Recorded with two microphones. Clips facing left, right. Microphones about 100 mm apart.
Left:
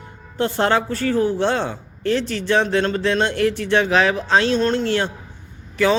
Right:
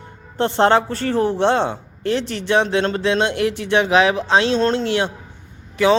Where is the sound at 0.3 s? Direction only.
25° right (ahead or behind).